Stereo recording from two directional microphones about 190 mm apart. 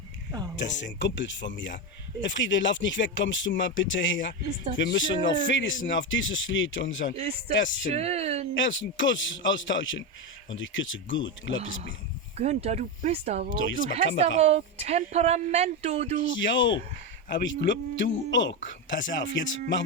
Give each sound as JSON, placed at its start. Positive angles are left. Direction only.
{"t": 0.5, "sound": "a man's voice", "side_deg": 70}
{"t": 7.2, "sound": "speech", "side_deg": -30}
{"t": 8.6, "sound": "a man's voice", "side_deg": 80}
{"t": 12.4, "sound": "speech", "side_deg": -35}
{"t": 13.5, "sound": "a man's voice", "side_deg": 90}
{"t": 14.3, "sound": "speech", "side_deg": -35}
{"t": 16.2, "sound": "speech", "side_deg": 85}
{"t": 17.2, "sound": "speech", "side_deg": 70}